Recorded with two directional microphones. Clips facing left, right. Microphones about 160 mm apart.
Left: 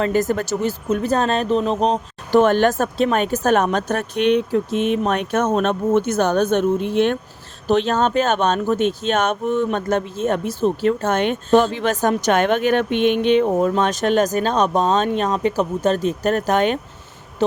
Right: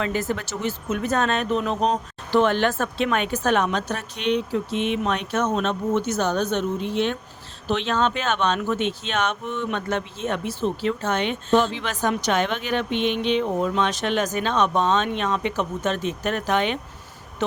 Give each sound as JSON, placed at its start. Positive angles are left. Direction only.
{"t": 0.0, "sound": "speech", "side_deg": 45}
{"t": 2.3, "sound": "speech", "side_deg": 45}
{"t": 7.7, "sound": "speech", "side_deg": 40}